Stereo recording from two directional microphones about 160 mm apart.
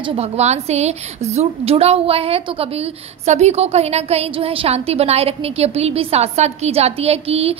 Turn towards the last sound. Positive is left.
turn(degrees=-40)  # may be behind; listen again after turning